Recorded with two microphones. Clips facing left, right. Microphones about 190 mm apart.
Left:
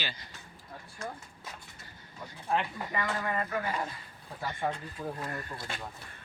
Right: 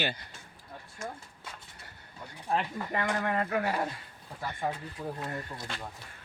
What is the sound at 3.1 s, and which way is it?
Speech, 60° right (ahead or behind).